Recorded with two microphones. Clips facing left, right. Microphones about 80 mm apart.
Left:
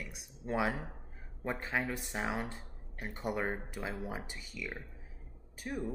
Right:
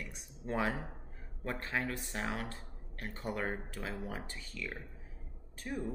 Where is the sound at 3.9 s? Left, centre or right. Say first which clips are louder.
Left 1 dB; centre.